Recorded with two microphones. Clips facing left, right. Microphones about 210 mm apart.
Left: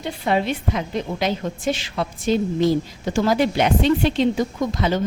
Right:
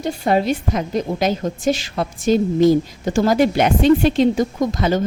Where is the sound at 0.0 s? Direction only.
40° right (ahead or behind).